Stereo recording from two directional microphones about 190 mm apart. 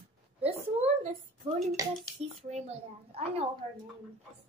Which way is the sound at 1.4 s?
30° right (ahead or behind).